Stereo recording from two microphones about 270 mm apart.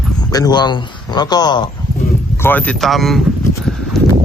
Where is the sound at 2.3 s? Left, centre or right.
Centre.